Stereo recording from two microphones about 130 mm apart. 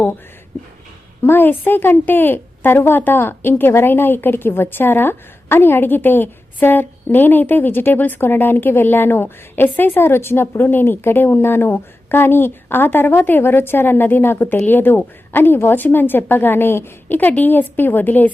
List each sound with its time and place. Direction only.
1.2 s a woman's voice: 15° left (ahead or behind)